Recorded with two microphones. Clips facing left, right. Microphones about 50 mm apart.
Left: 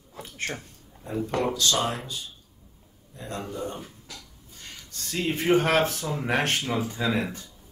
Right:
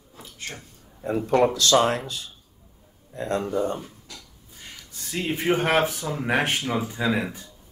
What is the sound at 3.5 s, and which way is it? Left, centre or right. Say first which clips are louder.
Speech: right 7 dB; right.